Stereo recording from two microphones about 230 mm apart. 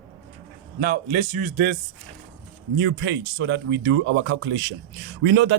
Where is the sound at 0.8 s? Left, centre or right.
Right.